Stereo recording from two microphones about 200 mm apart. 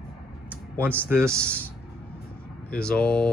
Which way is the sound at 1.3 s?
5° left (ahead or behind).